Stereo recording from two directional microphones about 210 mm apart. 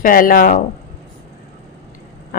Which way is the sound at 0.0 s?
40° left (ahead or behind).